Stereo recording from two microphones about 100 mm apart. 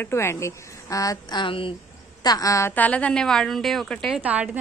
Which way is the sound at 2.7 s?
15° left (ahead or behind).